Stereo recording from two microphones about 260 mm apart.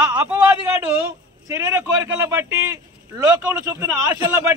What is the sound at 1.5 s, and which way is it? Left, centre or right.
A man's voice, centre.